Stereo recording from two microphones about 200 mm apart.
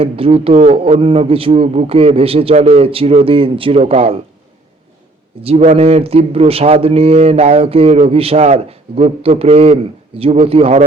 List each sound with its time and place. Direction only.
0.0 s a man's voice: 30° right (ahead or behind)
5.4 s a man's voice: 30° right (ahead or behind)